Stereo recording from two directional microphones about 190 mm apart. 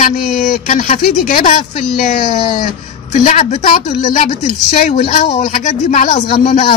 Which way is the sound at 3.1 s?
40° left (ahead or behind).